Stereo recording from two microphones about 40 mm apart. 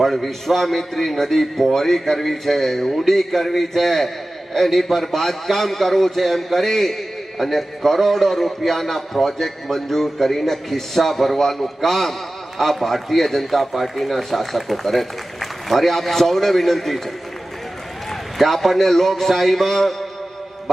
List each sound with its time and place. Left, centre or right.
0.0 s a man's voice: centre
18.1 s a man's voice: centre